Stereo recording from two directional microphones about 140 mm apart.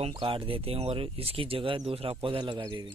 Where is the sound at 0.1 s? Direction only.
40° right (ahead or behind).